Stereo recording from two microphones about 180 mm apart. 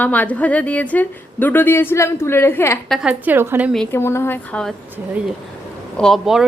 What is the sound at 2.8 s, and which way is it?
Speech, centre (ahead or behind).